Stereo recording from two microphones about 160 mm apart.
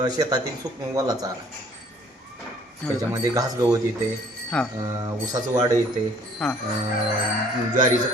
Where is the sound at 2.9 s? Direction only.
20° right (ahead or behind).